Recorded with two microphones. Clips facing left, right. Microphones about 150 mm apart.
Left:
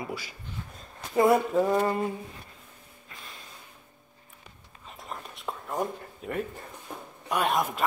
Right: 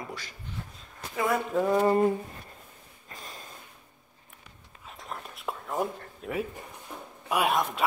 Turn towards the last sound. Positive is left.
turn(degrees=-5)  # may be behind; listen again after turning